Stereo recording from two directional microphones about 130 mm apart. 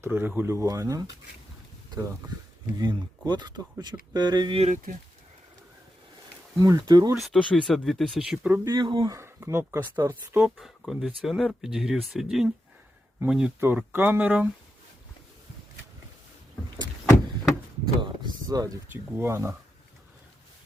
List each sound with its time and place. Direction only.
0.0 s speech: 15° right (ahead or behind)
2.7 s speech: 35° right (ahead or behind)
4.6 s speech: 75° right (ahead or behind)
6.6 s speech: 25° right (ahead or behind)
7.2 s speech: centre (ahead or behind)
8.4 s speech: 15° right (ahead or behind)
8.7 s speech: 35° right (ahead or behind)
9.1 s speech: 20° right (ahead or behind)
10.3 s speech: 5° right (ahead or behind)
18.0 s a sound: 30° right (ahead or behind)
18.9 s speech: 15° right (ahead or behind)